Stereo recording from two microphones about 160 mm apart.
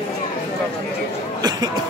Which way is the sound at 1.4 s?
25° right (ahead or behind).